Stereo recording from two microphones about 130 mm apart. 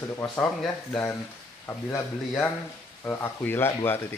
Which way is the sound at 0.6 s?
10° left (ahead or behind).